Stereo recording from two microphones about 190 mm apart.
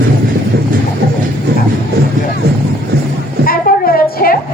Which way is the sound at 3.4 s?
50° left (ahead or behind).